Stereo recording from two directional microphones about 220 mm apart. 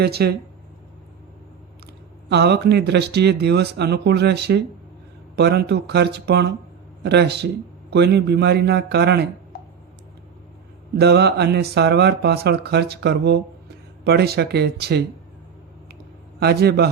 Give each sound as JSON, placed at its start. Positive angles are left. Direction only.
{"t": 0.0, "sound": "speech", "side_deg": -45}
{"t": 2.3, "sound": "speech", "side_deg": -50}
{"t": 10.9, "sound": "speech", "side_deg": -50}
{"t": 16.4, "sound": "speech", "side_deg": -45}